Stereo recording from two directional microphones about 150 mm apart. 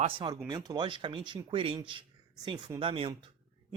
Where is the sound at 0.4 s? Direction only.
25° right (ahead or behind).